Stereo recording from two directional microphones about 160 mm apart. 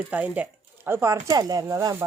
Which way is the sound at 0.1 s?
10° right (ahead or behind).